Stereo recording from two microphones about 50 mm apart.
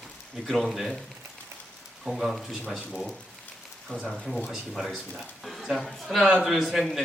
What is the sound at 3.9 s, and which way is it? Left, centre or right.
Speech, left.